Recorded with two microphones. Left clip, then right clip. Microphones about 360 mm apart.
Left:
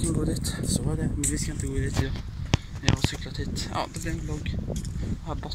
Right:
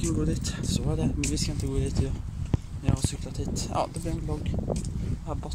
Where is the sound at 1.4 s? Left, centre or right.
Centre.